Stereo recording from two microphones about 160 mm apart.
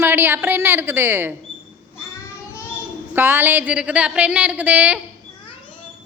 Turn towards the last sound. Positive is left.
turn(degrees=-10)  # may be behind; listen again after turning